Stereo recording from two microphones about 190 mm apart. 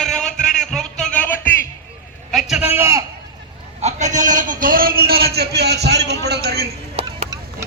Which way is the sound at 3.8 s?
40° right (ahead or behind).